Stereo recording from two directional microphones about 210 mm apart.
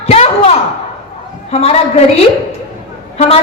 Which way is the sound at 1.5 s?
30° left (ahead or behind).